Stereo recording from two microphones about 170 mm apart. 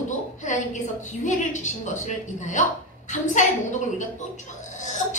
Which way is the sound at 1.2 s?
45° left (ahead or behind).